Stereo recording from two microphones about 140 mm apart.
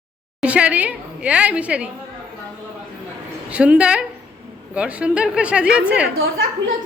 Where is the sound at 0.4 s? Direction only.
10° right (ahead or behind).